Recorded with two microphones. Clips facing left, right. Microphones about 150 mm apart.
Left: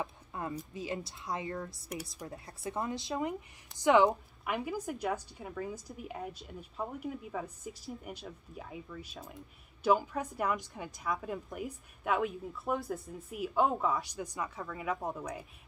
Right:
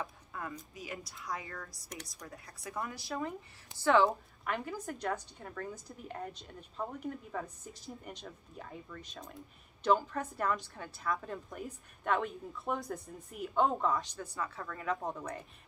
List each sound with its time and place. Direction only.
0.0 s a woman's voice: 25° left (ahead or behind); by 15.4 s 10° left (ahead or behind)